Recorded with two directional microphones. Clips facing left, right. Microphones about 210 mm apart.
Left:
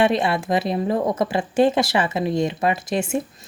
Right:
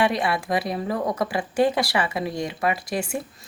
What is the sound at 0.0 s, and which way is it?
Speech, 25° left (ahead or behind).